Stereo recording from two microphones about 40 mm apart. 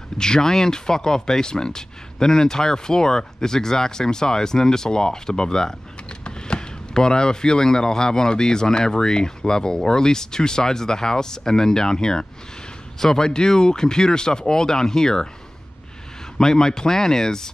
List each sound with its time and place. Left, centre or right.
0.2 s speech: centre
16.3 s speech: centre